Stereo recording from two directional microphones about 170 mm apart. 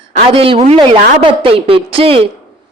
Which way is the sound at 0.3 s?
35° right (ahead or behind).